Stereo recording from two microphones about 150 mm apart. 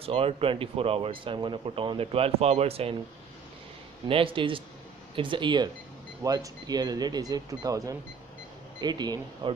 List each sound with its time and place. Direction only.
0.0 s speech: 40° right (ahead or behind)
4.1 s speech: 35° right (ahead or behind)